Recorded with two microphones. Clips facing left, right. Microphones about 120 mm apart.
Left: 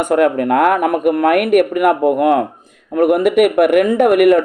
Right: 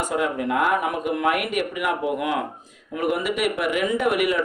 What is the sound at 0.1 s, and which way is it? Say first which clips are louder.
Speech: left 13 dB; 60° left (ahead or behind).